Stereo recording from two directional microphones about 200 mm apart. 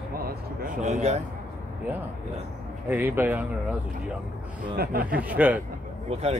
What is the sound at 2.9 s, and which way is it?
Speech, 10° right (ahead or behind).